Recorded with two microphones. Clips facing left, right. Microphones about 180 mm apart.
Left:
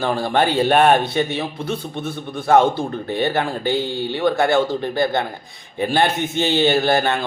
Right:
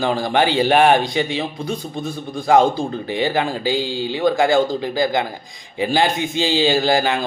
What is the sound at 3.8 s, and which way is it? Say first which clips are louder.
Speech: even; 90° right.